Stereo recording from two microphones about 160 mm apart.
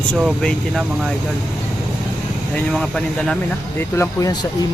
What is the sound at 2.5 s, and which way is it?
Speech, 5° left (ahead or behind).